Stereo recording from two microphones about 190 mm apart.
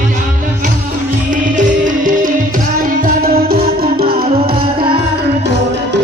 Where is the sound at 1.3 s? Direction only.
45° right (ahead or behind).